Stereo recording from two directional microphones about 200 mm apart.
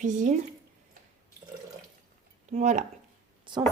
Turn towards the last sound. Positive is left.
turn(degrees=-25)  # may be behind; listen again after turning